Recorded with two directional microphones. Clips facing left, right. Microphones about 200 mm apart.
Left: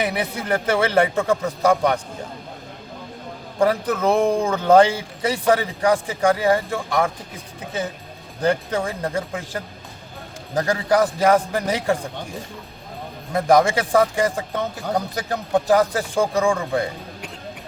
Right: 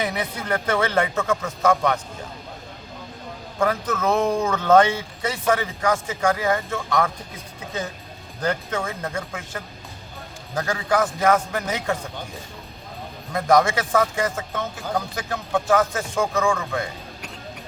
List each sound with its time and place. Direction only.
0.1 s speech: 30° left (ahead or behind)
3.6 s speech: 30° left (ahead or behind)
8.4 s speech: 30° left (ahead or behind)
13.3 s speech: 30° left (ahead or behind)